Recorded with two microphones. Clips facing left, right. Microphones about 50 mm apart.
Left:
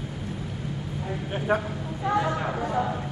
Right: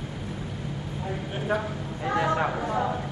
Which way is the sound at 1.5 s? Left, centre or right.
Left.